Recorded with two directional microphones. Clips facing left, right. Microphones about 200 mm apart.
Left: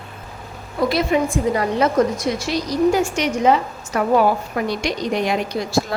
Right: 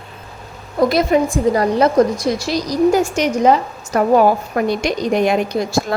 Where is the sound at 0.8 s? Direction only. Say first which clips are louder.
Right 4 dB; 45° right (ahead or behind).